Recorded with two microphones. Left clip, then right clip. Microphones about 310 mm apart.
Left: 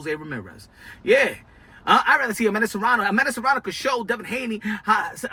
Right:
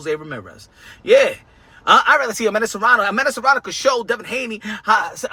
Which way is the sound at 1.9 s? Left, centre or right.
Centre.